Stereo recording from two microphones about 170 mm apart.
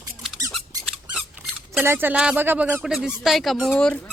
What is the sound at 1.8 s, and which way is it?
Speech, 10° right (ahead or behind).